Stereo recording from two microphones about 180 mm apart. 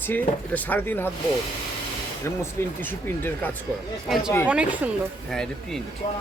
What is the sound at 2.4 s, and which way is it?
Speech, 10° left (ahead or behind).